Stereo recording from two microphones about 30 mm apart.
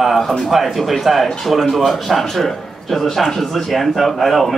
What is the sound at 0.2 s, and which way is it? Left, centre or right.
Speech, centre.